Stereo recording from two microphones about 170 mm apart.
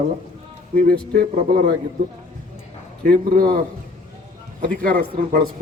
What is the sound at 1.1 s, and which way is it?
Speech, 65° right (ahead or behind).